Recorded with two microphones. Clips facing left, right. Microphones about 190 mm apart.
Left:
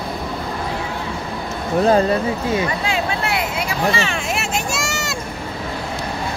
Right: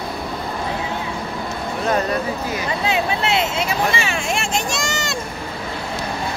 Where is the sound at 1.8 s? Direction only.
30° left (ahead or behind).